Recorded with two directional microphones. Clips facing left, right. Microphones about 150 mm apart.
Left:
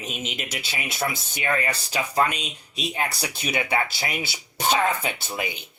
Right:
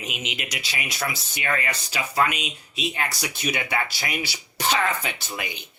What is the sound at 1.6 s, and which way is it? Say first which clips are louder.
Speech: left 2 dB; 35° left (ahead or behind).